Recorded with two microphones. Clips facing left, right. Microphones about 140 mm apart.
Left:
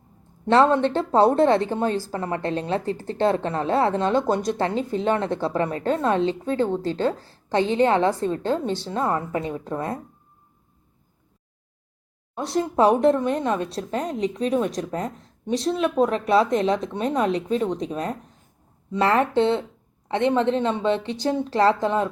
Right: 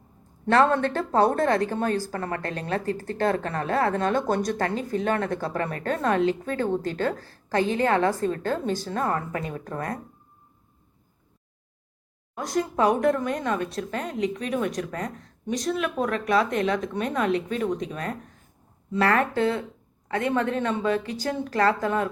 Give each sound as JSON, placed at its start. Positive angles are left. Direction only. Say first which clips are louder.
{"t": 0.4, "sound": "a woman's voice", "louder": "left 3 dB", "side_deg": 20}
{"t": 12.3, "sound": "a woman's voice", "louder": "left 2 dB", "side_deg": 30}